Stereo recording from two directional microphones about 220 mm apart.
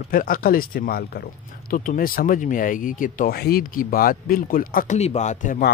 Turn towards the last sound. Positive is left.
turn(degrees=35)  # may be behind; listen again after turning